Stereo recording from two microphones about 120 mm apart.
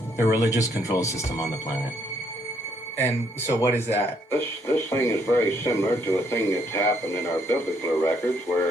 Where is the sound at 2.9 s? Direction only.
20° left (ahead or behind).